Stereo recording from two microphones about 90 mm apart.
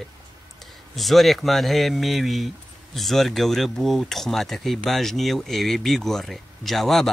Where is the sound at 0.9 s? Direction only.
Centre (ahead or behind).